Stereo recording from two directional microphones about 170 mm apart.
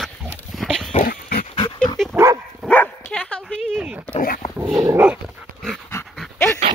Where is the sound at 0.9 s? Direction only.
60° left (ahead or behind).